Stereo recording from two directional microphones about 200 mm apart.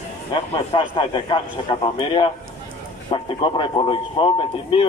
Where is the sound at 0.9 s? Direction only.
25° left (ahead or behind).